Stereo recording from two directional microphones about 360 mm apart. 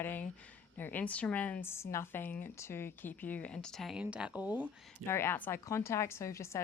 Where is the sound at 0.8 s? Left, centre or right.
Centre.